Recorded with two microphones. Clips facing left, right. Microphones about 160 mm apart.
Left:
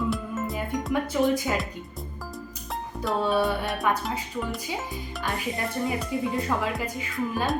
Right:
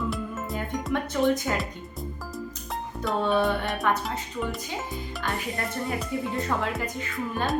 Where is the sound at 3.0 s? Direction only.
10° left (ahead or behind).